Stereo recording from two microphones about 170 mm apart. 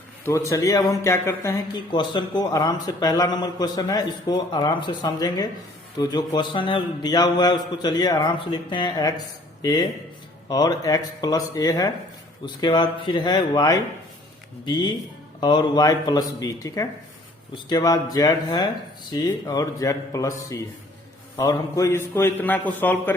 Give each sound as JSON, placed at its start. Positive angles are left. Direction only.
{"t": 0.3, "sound": "a man's voice", "side_deg": 15}